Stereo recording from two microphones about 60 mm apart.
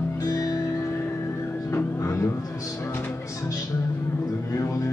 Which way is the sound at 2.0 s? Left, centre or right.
Left.